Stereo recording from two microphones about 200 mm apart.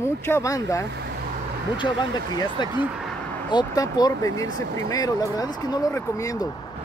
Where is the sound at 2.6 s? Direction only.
20° left (ahead or behind).